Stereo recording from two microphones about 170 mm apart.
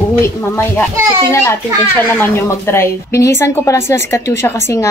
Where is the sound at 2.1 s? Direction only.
15° left (ahead or behind).